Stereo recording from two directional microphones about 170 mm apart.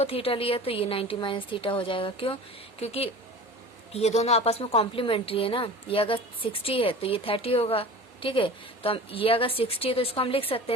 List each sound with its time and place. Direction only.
0.0 s a woman's voice: 35° left (ahead or behind)